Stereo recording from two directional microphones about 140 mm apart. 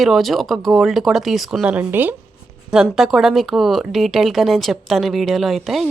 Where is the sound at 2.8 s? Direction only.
Centre (ahead or behind).